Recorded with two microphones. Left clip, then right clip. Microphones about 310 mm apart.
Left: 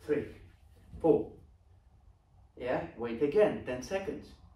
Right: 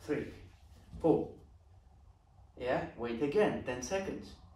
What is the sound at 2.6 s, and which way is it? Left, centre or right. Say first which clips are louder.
Speech: left 1 dB; centre.